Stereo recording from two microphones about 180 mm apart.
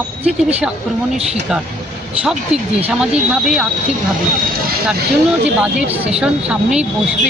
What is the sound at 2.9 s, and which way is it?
Speech, 5° right (ahead or behind).